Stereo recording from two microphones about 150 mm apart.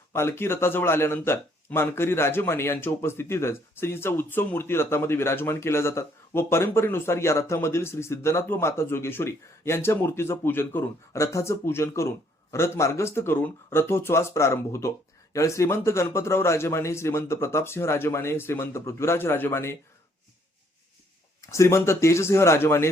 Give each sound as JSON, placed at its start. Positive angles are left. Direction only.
{"t": 0.1, "sound": "speech", "side_deg": 15}
{"t": 21.5, "sound": "speech", "side_deg": 20}